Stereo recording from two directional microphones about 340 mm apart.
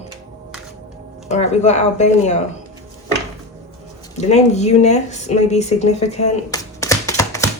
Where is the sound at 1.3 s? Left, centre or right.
Centre.